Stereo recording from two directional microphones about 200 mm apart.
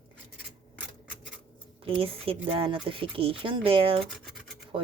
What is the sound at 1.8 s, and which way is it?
Speech, 25° right (ahead or behind).